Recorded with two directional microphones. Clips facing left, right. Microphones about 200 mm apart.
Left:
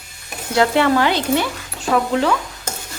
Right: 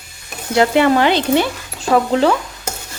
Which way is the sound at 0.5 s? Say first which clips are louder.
Right 3 dB; 20° right (ahead or behind).